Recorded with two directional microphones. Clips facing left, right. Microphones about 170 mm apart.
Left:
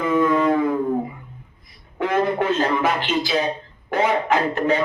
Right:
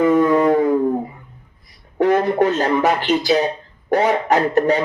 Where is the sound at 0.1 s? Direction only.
40° right (ahead or behind).